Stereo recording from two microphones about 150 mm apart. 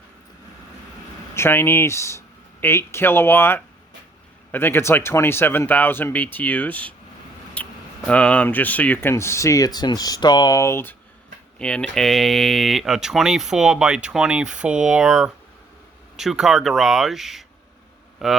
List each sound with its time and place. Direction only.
1.4 s speech: 15° left (ahead or behind)
11.6 s speech: 5° left (ahead or behind)